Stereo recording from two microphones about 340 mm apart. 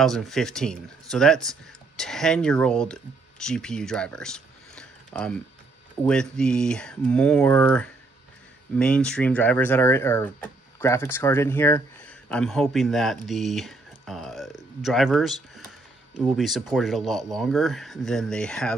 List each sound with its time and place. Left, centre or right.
0.0 s speech: centre